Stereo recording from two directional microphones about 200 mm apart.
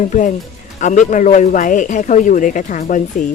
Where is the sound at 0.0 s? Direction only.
40° left (ahead or behind).